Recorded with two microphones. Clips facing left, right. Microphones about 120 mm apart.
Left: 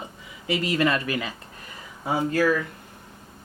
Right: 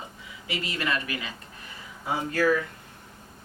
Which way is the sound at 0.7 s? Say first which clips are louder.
Left 6 dB; 40° left (ahead or behind).